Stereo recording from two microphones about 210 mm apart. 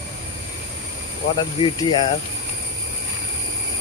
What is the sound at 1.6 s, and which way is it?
Speech, 20° left (ahead or behind).